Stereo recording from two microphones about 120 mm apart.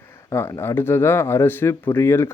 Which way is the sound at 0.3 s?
20° left (ahead or behind).